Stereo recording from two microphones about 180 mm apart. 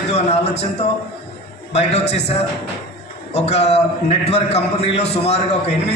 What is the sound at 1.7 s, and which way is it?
Speech, 35° left (ahead or behind).